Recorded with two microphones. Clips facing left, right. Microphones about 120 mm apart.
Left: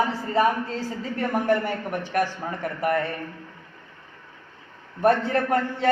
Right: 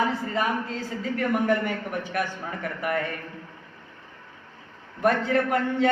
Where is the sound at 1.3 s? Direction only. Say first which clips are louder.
Left 2 dB; 35° left (ahead or behind).